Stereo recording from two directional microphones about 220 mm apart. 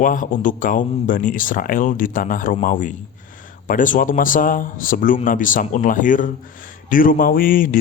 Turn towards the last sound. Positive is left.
turn(degrees=40)  # may be behind; listen again after turning